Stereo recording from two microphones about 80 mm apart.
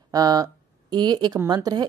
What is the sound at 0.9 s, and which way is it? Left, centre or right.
Speech, right.